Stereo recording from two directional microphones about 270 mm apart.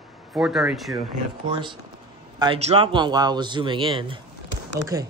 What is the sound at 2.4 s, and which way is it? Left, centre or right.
Speech, right.